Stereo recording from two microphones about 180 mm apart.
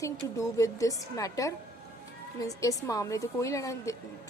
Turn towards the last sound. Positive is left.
turn(degrees=20)  # may be behind; listen again after turning